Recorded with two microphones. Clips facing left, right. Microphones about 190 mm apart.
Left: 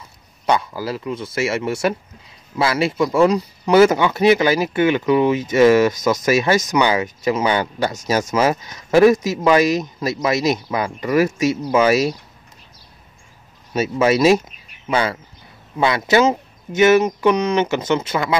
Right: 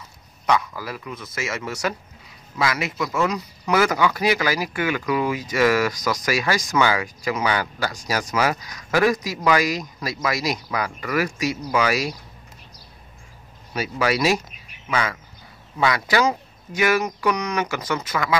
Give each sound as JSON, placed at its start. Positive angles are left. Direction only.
{"t": 0.5, "sound": "speech", "side_deg": 30}
{"t": 13.7, "sound": "speech", "side_deg": 25}